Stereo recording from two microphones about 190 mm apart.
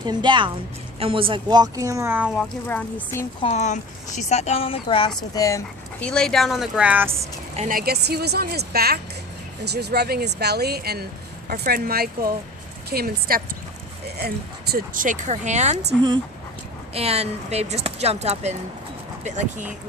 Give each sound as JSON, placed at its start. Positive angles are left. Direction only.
{"t": 0.0, "sound": "speech", "side_deg": -25}
{"t": 2.3, "sound": "speech", "side_deg": 5}
{"t": 3.4, "sound": "speech", "side_deg": 35}
{"t": 6.0, "sound": "speech", "side_deg": 5}
{"t": 7.1, "sound": "a woman's voice", "side_deg": -35}
{"t": 16.9, "sound": "speech", "side_deg": -30}